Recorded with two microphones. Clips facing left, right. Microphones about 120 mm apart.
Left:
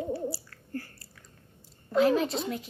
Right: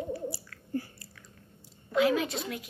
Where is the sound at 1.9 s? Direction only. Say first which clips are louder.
Left 2 dB; 35° left (ahead or behind).